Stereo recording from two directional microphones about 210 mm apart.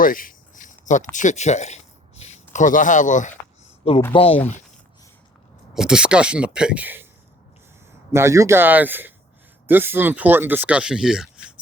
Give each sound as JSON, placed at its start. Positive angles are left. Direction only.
{"t": 0.0, "sound": "a sound", "side_deg": 40}
{"t": 4.1, "sound": "speech", "side_deg": 25}
{"t": 5.7, "sound": "speech", "side_deg": -5}
{"t": 8.1, "sound": "speech", "side_deg": -15}